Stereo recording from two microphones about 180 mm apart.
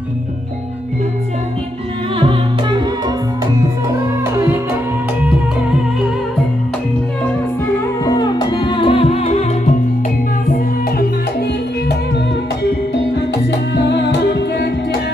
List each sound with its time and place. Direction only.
2.1 s music: 30° right (ahead or behind)
8.0 s music: 20° left (ahead or behind)